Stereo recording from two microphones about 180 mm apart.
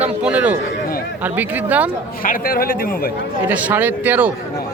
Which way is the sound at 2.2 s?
50° left (ahead or behind).